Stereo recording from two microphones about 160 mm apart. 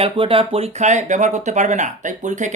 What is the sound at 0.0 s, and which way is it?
Speech, 35° right (ahead or behind).